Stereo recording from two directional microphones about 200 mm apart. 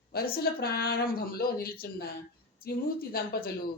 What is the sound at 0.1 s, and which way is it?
Speech, 50° left (ahead or behind).